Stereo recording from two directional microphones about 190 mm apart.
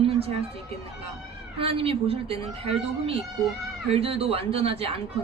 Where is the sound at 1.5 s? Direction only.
30° right (ahead or behind).